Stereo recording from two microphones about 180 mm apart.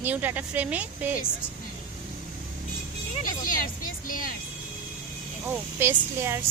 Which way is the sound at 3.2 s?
50° left (ahead or behind).